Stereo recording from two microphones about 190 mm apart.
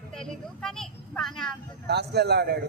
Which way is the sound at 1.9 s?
60° right (ahead or behind).